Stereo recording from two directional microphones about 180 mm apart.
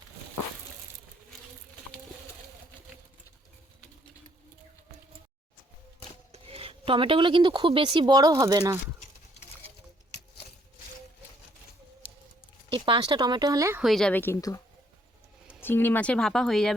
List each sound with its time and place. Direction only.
6.3 s speech: 30° right (ahead or behind)
12.7 s speech: 30° right (ahead or behind)
13.8 s a woman's voice: centre (ahead or behind)
15.6 s speech: 10° left (ahead or behind)